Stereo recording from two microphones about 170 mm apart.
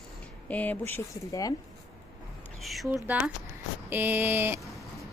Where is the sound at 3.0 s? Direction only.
5° right (ahead or behind).